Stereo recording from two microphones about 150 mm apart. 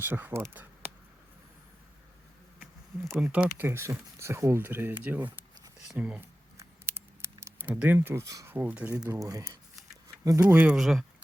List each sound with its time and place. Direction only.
0.0 s speech: 15° right (ahead or behind)
3.2 s speech: 5° right (ahead or behind)
6.6 s a sound: 15° right (ahead or behind)
9.1 s speech: 20° right (ahead or behind)
10.4 s speech: 10° right (ahead or behind)